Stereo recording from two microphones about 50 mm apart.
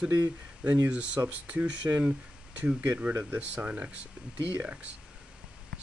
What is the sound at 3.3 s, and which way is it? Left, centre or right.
Speech, right.